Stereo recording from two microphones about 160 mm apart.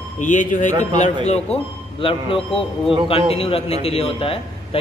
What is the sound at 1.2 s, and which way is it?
A man's voice, 40° left (ahead or behind).